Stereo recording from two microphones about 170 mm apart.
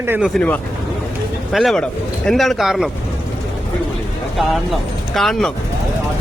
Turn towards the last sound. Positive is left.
turn(degrees=0)  # may be behind; listen again after turning